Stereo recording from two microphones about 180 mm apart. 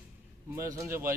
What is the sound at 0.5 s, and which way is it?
Speech, 15° right (ahead or behind).